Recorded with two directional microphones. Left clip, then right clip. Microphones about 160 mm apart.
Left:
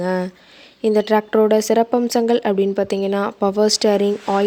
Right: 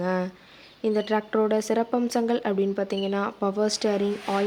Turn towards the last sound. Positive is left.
turn(degrees=45)  # may be behind; listen again after turning